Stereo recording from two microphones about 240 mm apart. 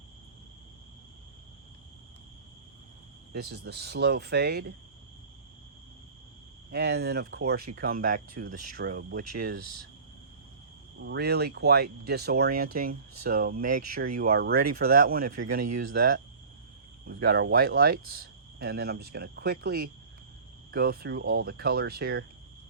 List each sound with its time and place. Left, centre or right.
3.3 s speech: right
6.7 s speech: right
11.0 s speech: right